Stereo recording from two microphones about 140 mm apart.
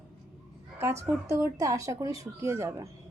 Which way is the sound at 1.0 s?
20° right (ahead or behind).